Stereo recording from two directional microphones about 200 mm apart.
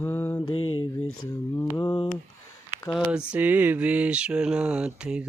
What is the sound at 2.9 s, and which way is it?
Mantra, 5° right (ahead or behind).